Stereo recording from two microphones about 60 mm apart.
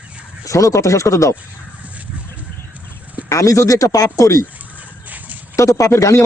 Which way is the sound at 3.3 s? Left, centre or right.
Left.